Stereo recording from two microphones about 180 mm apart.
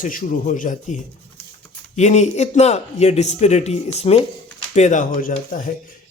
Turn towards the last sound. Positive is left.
turn(degrees=45)  # may be behind; listen again after turning